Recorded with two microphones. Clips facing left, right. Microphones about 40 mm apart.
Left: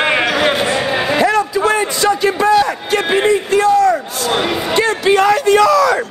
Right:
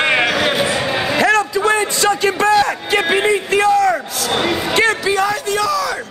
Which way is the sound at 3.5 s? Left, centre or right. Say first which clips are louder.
Left 2 dB; right.